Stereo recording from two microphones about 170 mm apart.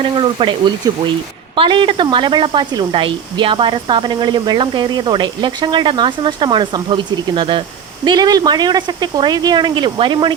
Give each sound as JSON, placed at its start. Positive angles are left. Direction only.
{"t": 0.0, "sound": "a woman's voice", "side_deg": -30}